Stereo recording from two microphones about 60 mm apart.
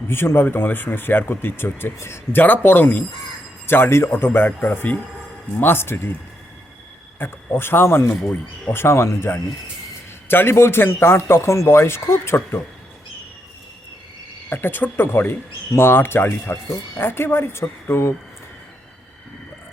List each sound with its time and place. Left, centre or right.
0.1 s speech: left
2.4 s speech: left
7.2 s speech: left
14.5 s speech: left